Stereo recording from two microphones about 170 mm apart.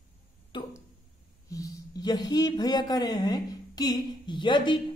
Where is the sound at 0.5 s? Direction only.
25° left (ahead or behind).